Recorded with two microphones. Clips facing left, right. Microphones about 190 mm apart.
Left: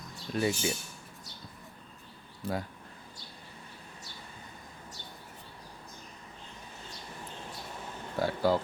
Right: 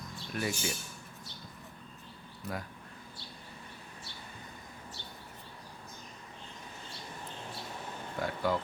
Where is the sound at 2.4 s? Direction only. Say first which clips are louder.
Left 5 dB; 30° left (ahead or behind).